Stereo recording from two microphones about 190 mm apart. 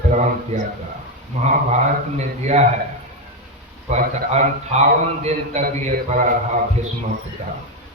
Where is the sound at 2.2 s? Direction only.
35° right (ahead or behind).